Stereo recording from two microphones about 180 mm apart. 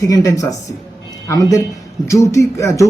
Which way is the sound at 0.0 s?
20° left (ahead or behind).